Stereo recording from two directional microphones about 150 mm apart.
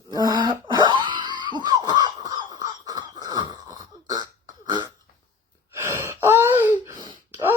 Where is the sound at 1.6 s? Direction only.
25° right (ahead or behind).